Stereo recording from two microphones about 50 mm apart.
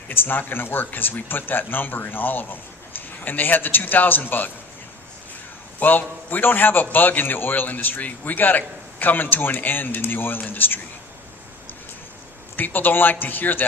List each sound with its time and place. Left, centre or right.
0.1 s speech: left
5.8 s speech: left
12.5 s speech: left